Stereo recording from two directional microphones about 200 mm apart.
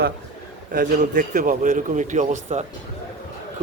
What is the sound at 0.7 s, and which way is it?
A man's voice, 40° right (ahead or behind).